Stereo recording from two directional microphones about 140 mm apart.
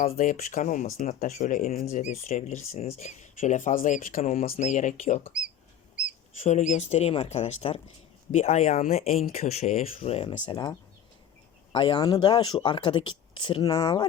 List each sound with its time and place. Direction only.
0.2 s speech: 65° left (ahead or behind)
4.4 s speech: 50° left (ahead or behind)
6.4 s speech: 60° left (ahead or behind)
10.4 s speech: 35° left (ahead or behind)